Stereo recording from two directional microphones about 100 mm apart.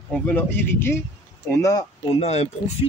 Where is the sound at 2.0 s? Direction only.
85° left.